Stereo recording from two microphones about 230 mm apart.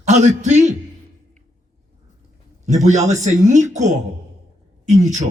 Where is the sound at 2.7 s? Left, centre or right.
Right.